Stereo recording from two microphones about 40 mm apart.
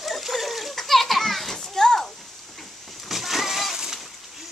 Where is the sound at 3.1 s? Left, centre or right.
Centre.